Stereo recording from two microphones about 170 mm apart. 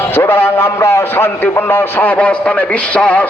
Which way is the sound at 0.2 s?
15° left (ahead or behind).